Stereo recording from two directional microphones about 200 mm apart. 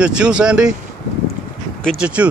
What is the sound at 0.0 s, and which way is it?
Speech, 5° right (ahead or behind).